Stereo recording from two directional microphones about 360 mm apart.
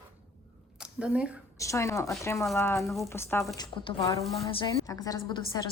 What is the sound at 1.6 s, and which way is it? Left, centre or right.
A woman's voice, centre.